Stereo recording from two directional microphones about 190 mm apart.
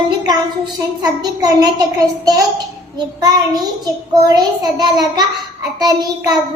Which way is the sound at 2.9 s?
20° right (ahead or behind).